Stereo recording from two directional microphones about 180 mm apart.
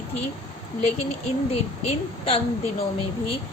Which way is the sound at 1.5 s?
35° left (ahead or behind).